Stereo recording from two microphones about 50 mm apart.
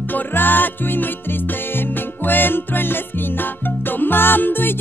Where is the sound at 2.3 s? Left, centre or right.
Left.